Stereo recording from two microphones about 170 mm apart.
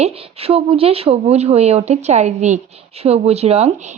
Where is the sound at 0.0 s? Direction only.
35° right (ahead or behind).